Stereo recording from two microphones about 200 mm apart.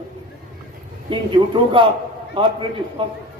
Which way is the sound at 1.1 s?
25° right (ahead or behind).